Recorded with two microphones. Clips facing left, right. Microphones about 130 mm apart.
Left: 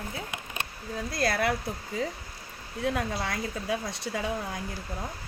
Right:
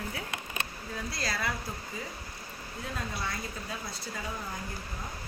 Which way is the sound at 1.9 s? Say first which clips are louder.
Left 12 dB; 90° left.